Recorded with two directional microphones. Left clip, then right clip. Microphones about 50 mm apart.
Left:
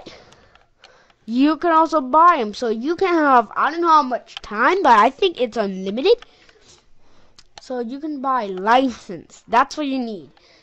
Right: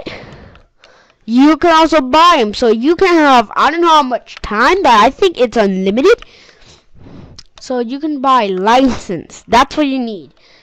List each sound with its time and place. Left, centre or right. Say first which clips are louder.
0.0 s a sound: right 13 dB; right
1.2 s a woman's voice: right 9 dB; right
4.6 s a woman's voice: right 5 dB; centre
7.6 s a woman's voice: right 9 dB; right
9.1 s speech: right 5 dB; right